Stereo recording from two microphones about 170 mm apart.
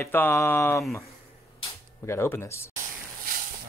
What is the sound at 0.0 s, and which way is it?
Speech, 10° left (ahead or behind).